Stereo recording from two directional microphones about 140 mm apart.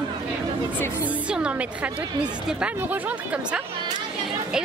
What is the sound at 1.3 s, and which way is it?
A woman's voice, 10° right (ahead or behind).